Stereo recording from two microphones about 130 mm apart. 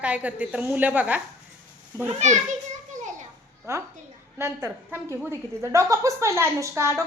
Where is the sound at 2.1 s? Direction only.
65° right (ahead or behind).